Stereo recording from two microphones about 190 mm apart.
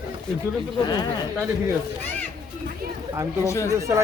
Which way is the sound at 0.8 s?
20° left (ahead or behind).